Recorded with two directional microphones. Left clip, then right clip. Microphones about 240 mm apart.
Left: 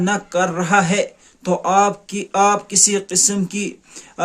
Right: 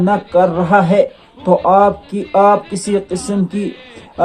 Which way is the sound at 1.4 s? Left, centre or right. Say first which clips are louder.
Right 8 dB; left.